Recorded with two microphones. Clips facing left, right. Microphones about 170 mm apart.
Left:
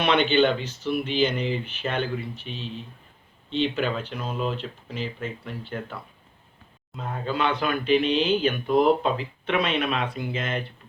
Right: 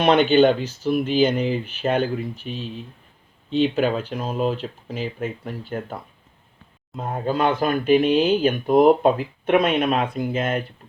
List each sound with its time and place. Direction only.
0.0 s speech: 45° right (ahead or behind)